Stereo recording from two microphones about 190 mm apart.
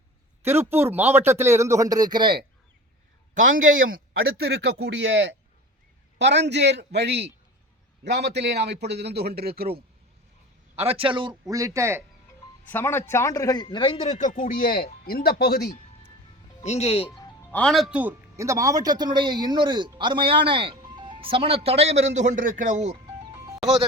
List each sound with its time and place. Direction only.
0.4 s speech: 10° right (ahead or behind)
3.6 s a man's voice: 90° right; by 9.6 s 55° right (ahead or behind)
10.8 s a man's voice: 30° right (ahead or behind); by 12.0 s 15° right (ahead or behind)
12.7 s a man's voice: 10° left (ahead or behind); by 15.7 s 55° left (ahead or behind)
16.6 s a man's voice: 35° left (ahead or behind)
17.5 s a man's voice: 5° left (ahead or behind); by 23.0 s 35° right (ahead or behind)
23.3 s music: 15° right (ahead or behind)